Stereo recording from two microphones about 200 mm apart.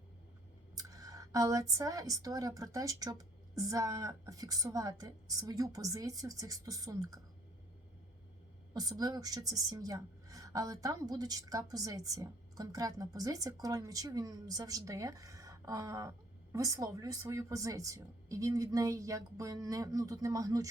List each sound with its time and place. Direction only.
0.8 s a woman's voice: 15° right (ahead or behind)
8.7 s a woman's voice: 20° right (ahead or behind)